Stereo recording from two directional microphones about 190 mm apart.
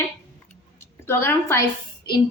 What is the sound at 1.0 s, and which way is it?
Speech, 15° left (ahead or behind).